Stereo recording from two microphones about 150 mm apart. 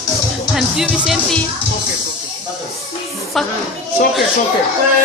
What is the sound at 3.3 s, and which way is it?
Speech, centre (ahead or behind).